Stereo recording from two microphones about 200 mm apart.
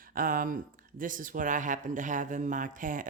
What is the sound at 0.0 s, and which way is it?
Speech, 45° right (ahead or behind).